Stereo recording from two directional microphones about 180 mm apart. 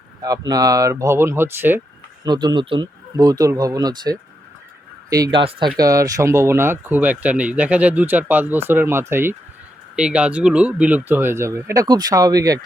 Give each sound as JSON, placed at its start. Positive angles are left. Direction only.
{"t": 0.2, "sound": "speech", "side_deg": -20}
{"t": 2.2, "sound": "speech", "side_deg": -25}